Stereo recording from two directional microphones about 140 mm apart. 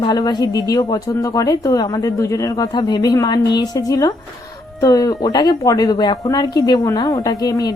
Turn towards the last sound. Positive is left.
turn(degrees=30)  # may be behind; listen again after turning